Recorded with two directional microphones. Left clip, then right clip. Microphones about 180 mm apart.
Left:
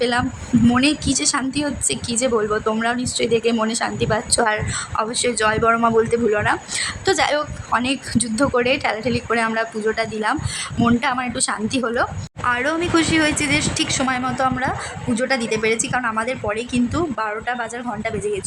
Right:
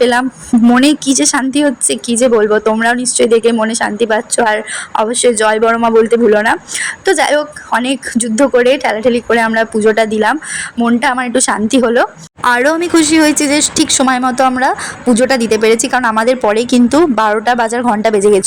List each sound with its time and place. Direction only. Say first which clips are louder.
0.0 s a woman's voice: right 9 dB; 25° right (ahead or behind); by 18.4 s 40° right (ahead or behind)